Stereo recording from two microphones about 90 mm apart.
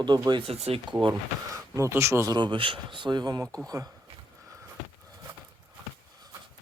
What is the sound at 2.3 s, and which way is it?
Speech, 60° right (ahead or behind).